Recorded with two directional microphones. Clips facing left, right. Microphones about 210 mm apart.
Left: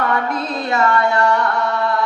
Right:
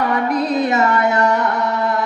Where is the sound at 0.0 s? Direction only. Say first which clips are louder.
Right 3 dB; 20° right (ahead or behind).